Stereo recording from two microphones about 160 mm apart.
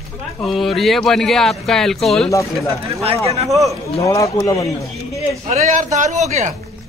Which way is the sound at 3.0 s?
40° right (ahead or behind).